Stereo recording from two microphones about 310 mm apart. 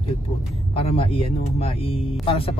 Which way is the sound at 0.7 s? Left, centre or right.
Centre.